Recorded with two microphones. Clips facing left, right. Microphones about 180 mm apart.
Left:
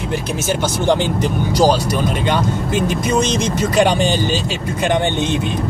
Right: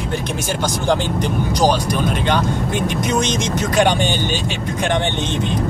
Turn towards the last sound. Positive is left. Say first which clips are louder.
# left 3 dB
turn(degrees=10)  # may be behind; listen again after turning